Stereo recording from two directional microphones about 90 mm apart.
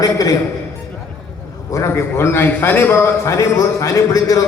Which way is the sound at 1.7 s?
30° left (ahead or behind).